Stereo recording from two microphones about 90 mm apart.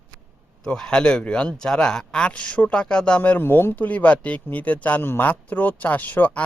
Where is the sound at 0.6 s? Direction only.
5° left (ahead or behind).